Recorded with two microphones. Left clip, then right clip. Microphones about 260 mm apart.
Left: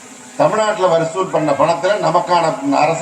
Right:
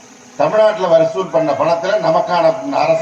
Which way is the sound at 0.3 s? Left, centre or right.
Left.